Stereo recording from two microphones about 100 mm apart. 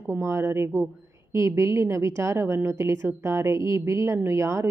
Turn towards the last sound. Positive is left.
turn(degrees=-30)  # may be behind; listen again after turning